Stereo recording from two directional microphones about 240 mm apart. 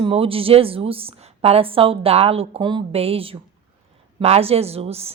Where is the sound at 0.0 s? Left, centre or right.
Right.